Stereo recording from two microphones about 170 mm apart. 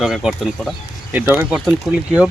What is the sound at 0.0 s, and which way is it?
Speech, 5° right (ahead or behind).